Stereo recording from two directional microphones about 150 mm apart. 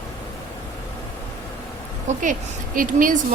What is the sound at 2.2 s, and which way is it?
Speech, 60° right (ahead or behind).